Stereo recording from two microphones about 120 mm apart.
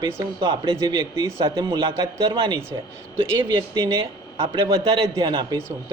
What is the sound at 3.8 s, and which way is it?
A man's voice, 40° right (ahead or behind).